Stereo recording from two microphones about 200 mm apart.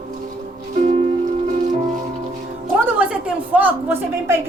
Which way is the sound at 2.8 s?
5° right (ahead or behind).